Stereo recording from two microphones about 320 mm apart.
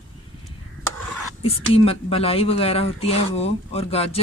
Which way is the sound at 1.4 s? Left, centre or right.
Centre.